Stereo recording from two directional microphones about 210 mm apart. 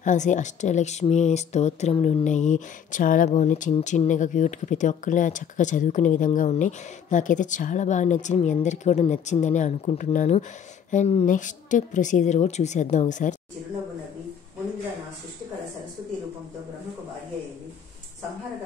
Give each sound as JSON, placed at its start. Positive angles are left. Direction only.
{"t": 0.0, "sound": "speech", "side_deg": 35}